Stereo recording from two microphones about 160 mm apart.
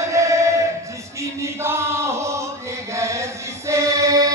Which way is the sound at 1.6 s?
15° right (ahead or behind).